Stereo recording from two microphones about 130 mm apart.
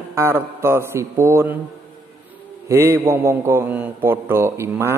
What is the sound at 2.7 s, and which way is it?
A man's voice, 20° right (ahead or behind).